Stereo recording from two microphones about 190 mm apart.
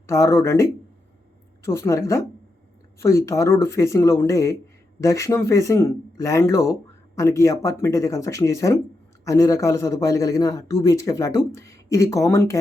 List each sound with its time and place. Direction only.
0.1 s a man's voice: 15° left (ahead or behind)